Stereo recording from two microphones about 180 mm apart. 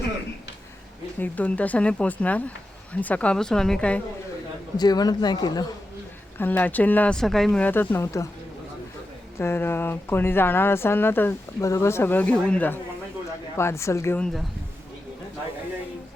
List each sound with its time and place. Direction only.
1.2 s speech: 10° left (ahead or behind)
4.8 s a man's voice: 20° left (ahead or behind)
6.4 s speech: 10° left (ahead or behind)
9.4 s speech: 15° left (ahead or behind)